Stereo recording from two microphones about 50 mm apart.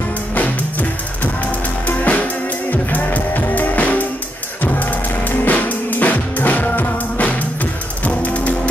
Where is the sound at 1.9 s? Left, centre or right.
Left.